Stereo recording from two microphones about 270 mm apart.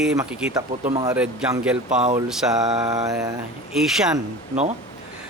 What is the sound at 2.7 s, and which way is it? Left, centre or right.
Speech, centre.